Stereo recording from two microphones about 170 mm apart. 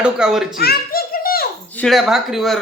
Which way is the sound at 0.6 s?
65° left (ahead or behind).